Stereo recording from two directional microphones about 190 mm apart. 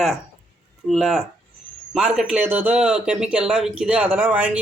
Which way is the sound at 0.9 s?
Centre (ahead or behind).